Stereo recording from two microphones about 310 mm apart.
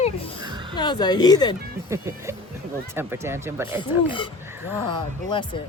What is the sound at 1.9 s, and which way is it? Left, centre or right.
Speech, centre.